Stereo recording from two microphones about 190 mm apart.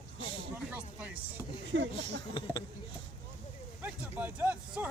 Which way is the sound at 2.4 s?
25° left (ahead or behind).